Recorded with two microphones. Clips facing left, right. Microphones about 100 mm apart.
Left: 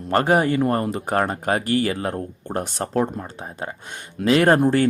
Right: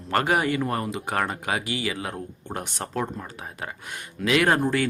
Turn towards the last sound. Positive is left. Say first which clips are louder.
# left 5 dB
turn(degrees=35)  # may be behind; listen again after turning